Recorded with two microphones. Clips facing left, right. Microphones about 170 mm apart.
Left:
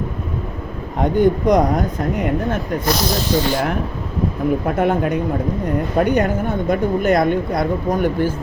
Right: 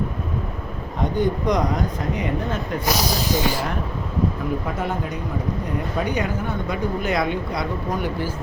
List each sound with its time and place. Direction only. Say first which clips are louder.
1.0 s speech: left 6 dB; 50° left (ahead or behind)
2.8 s speech: left 1 dB; 10° right (ahead or behind)
4.6 s speech: left 8 dB; 60° left (ahead or behind)